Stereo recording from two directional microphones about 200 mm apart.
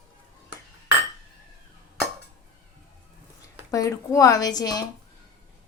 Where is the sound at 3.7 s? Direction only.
20° left (ahead or behind).